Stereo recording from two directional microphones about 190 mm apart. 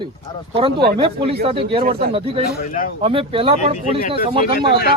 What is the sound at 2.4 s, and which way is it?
Speech, 45° left (ahead or behind).